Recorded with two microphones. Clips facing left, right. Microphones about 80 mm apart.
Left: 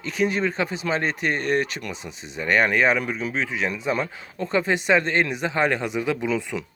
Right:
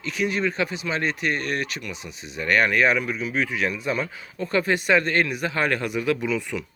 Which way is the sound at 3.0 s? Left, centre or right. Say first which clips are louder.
Right 1 dB; left.